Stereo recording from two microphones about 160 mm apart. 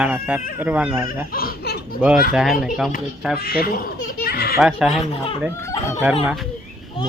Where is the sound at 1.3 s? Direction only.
65° left (ahead or behind).